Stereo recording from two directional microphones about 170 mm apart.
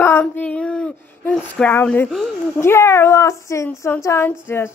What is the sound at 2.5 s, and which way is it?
A woman's voice, 15° left (ahead or behind).